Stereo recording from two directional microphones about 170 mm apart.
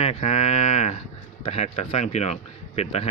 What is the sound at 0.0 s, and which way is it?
Speech, 40° left (ahead or behind).